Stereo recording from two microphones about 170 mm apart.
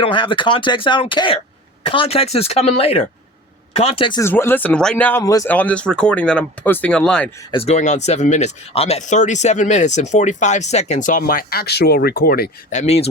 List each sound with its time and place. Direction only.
0.0 s speech: 30° left (ahead or behind)
4.2 s speech: 15° left (ahead or behind)
5.2 s speech: 20° left (ahead or behind)
5.5 s speech: 10° left (ahead or behind)
7.5 s speech: 35° left (ahead or behind); by 12.5 s 65° left (ahead or behind)
12.7 s speech: 40° left (ahead or behind)